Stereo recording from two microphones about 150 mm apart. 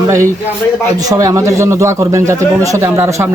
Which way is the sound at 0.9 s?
25° right (ahead or behind).